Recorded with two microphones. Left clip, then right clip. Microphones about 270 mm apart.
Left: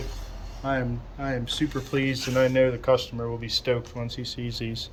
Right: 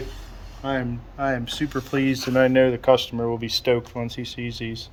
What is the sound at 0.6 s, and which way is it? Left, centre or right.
Speech, centre.